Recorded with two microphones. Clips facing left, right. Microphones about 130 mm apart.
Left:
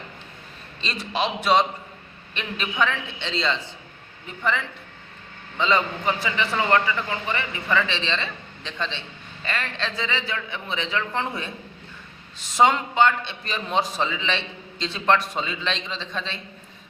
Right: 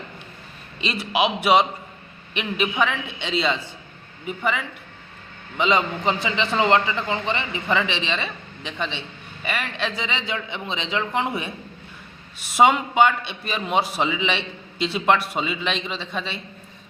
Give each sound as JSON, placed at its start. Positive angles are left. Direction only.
{"t": 0.8, "sound": "a man's voice", "side_deg": -10}